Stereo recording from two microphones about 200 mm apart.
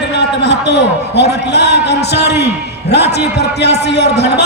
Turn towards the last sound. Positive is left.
turn(degrees=55)  # may be behind; listen again after turning